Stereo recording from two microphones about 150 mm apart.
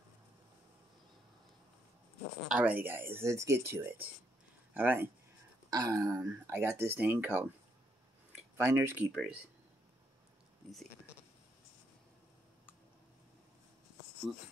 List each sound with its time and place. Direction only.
2.4 s speech: 10° right (ahead or behind)
5.7 s speech: 25° right (ahead or behind)
8.5 s speech: 15° right (ahead or behind)